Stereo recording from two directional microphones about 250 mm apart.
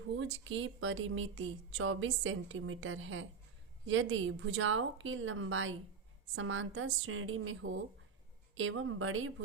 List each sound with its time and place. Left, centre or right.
0.2 s speech: right